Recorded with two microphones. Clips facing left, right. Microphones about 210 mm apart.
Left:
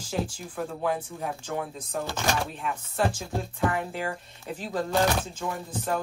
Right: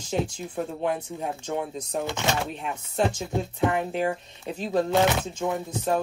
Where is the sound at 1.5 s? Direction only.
20° right (ahead or behind).